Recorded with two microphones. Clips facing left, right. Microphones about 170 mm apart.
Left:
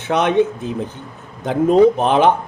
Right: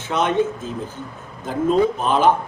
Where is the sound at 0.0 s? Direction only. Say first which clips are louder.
Left 4 dB; 65° left (ahead or behind).